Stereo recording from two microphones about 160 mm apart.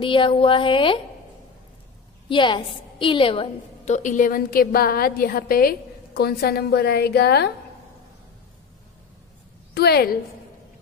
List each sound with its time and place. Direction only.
0.0 s speech: 30° left (ahead or behind)
2.2 s a woman's voice: 30° left (ahead or behind)
3.9 s a woman's voice: 50° left (ahead or behind); by 7.5 s 90° left
9.8 s a woman's voice: 80° left